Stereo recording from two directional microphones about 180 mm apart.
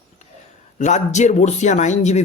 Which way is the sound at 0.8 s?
40° left (ahead or behind).